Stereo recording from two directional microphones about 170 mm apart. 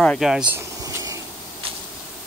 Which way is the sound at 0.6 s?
20° right (ahead or behind).